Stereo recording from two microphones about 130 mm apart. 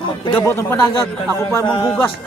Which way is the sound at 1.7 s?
40° left (ahead or behind).